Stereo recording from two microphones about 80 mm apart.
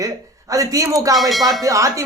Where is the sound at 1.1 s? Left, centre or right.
Centre.